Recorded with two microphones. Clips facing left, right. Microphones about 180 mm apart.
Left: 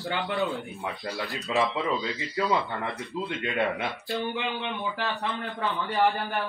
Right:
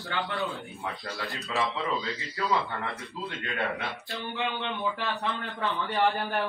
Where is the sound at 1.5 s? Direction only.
15° left (ahead or behind).